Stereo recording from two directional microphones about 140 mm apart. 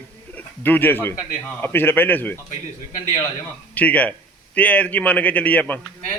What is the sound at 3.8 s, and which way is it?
A man's voice, 10° left (ahead or behind).